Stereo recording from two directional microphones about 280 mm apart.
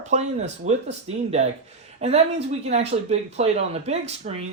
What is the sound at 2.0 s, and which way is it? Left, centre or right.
Speech, right.